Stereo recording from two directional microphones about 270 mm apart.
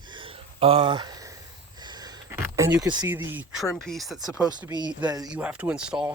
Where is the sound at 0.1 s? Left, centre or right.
Centre.